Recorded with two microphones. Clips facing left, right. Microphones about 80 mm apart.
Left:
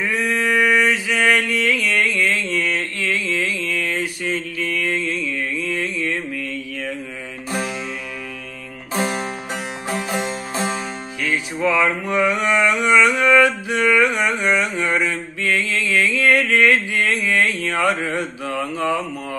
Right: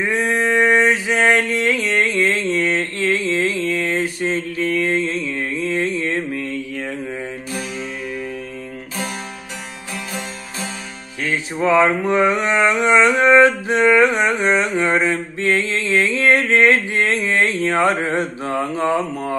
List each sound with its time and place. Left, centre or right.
0.0 s a sound: right
8.9 s music: left
11.2 s mantra: right